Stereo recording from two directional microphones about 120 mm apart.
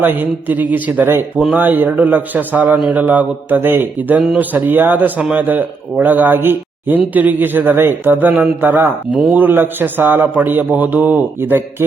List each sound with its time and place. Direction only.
0.0 s a man's voice: 15° right (ahead or behind)